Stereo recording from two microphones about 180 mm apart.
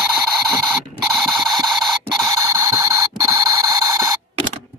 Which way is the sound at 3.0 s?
20° right (ahead or behind).